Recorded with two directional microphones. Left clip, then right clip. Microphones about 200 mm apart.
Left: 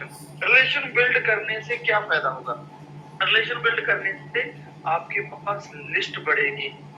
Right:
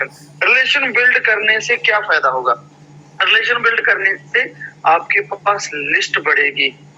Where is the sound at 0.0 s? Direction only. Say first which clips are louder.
Right 10 dB; 45° right (ahead or behind).